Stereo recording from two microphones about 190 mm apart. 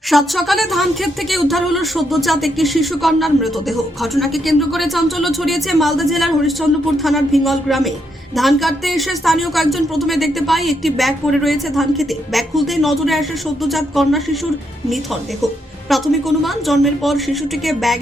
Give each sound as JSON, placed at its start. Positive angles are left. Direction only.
{"t": 0.1, "sound": "a woman's voice", "side_deg": 0}
{"t": 15.9, "sound": "a woman's voice", "side_deg": 0}